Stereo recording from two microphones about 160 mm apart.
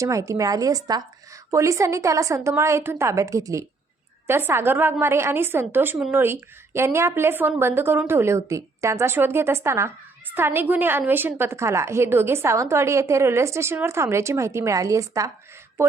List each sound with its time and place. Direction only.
0.0 s a woman's voice: 20° right (ahead or behind)